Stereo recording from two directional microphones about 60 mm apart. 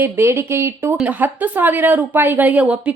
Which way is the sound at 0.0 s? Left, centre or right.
Right.